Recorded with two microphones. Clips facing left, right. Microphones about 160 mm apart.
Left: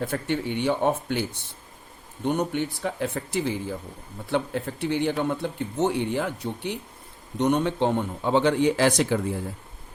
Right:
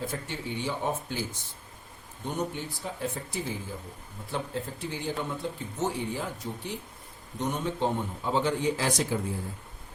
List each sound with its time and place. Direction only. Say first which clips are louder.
0.0 s speech: left 8 dB; 65° left (ahead or behind)